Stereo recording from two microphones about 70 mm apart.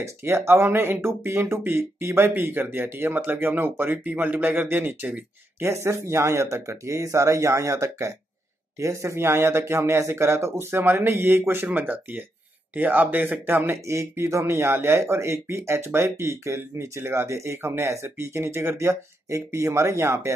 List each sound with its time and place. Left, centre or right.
0.0 s speech: right
5.7 s speech: right